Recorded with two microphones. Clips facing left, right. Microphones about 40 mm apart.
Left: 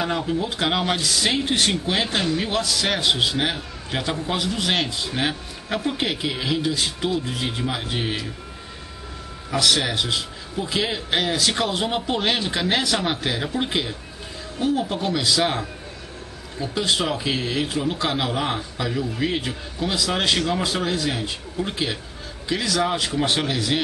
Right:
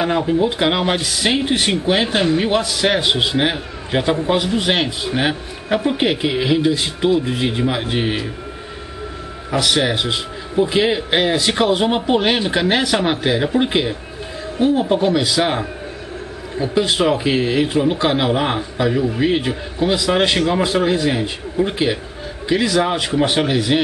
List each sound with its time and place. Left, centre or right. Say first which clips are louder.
0.0 s speech: right 7 dB; right
9.5 s speech: right 4 dB; centre